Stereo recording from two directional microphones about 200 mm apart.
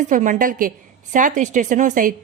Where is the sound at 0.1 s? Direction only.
40° right (ahead or behind).